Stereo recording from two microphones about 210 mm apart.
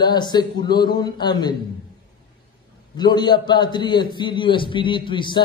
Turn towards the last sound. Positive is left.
turn(degrees=20)  # may be behind; listen again after turning